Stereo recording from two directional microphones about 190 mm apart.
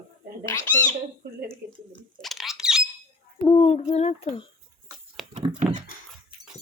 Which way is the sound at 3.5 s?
35° left (ahead or behind).